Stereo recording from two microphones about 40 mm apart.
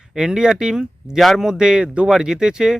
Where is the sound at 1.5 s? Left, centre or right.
Centre.